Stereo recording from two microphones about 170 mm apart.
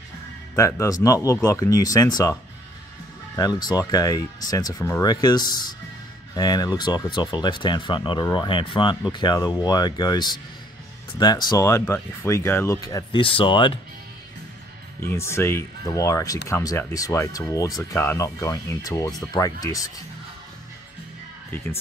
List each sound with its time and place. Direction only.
0.6 s speech: 15° left (ahead or behind)
3.3 s speech: 20° left (ahead or behind)
15.0 s speech: 15° left (ahead or behind)
21.5 s speech: 15° left (ahead or behind)